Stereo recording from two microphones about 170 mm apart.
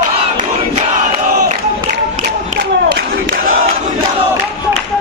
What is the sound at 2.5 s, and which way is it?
Battle cry, 60° right (ahead or behind).